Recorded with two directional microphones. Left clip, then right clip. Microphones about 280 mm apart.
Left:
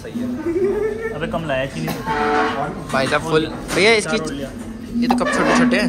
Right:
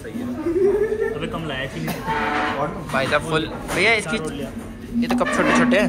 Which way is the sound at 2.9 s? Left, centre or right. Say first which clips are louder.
Left 3 dB; centre.